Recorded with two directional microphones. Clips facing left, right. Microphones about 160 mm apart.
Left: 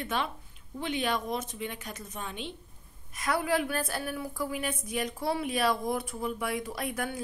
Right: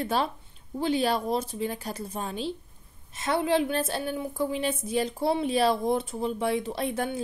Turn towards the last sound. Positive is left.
turn(degrees=-25)  # may be behind; listen again after turning